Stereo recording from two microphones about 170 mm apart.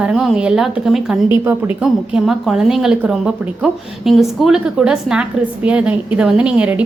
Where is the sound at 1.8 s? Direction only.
5° right (ahead or behind).